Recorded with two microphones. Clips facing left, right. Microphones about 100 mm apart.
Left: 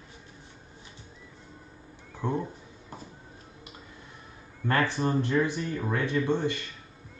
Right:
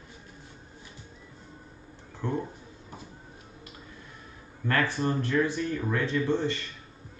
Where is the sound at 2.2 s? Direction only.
20° left (ahead or behind).